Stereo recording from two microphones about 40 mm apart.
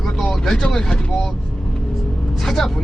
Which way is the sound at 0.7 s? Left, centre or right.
Centre.